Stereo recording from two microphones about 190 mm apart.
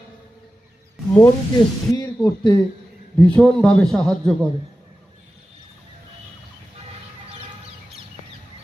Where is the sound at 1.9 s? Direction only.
15° left (ahead or behind).